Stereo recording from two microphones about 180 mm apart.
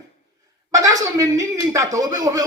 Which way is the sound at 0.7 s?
20° right (ahead or behind).